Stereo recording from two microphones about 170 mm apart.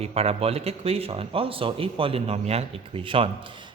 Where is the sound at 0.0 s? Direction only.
35° right (ahead or behind).